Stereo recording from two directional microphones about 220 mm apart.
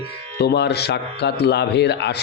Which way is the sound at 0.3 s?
50° left (ahead or behind).